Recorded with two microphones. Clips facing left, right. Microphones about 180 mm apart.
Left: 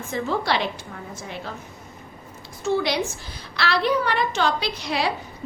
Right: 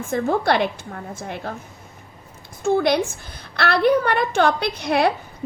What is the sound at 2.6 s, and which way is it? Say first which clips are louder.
A woman's voice: right 4 dB; 55° right (ahead or behind).